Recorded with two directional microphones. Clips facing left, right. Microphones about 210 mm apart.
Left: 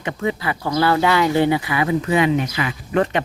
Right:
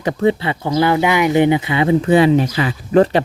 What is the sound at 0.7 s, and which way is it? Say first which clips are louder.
Speech: right 2 dB; 20° right (ahead or behind).